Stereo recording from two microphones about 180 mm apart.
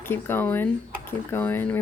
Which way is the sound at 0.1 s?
10° left (ahead or behind).